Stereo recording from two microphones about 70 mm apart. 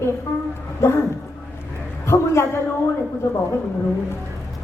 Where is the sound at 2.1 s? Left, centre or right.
Left.